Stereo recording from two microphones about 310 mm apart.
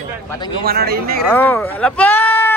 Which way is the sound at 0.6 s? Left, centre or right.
Right.